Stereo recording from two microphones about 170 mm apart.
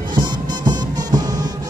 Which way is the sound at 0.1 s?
25° right (ahead or behind).